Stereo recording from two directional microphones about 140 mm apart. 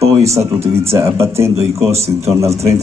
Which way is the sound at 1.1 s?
20° right (ahead or behind).